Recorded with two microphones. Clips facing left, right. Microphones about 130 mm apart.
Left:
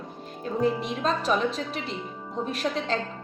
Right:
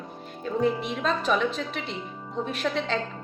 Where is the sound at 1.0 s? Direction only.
35° left (ahead or behind).